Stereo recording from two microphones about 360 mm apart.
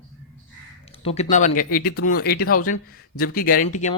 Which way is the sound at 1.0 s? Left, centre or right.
Centre.